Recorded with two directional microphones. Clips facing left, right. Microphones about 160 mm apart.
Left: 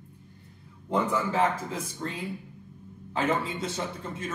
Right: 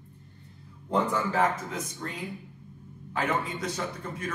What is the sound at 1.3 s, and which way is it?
A man's voice, 30° left (ahead or behind).